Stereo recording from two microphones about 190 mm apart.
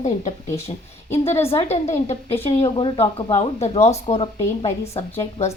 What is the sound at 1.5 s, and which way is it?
A woman's voice, 35° left (ahead or behind).